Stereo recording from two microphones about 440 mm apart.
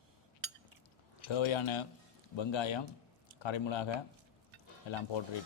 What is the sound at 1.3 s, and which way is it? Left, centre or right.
A man's voice, left.